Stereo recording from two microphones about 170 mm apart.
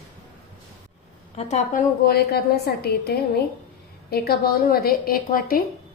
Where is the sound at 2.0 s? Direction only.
65° left (ahead or behind).